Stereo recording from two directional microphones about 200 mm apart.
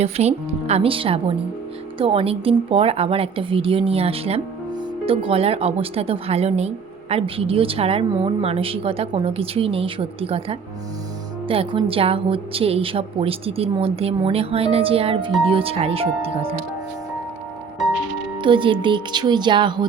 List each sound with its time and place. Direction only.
0.0 s speech: 30° right (ahead or behind)
18.3 s speech: 25° right (ahead or behind)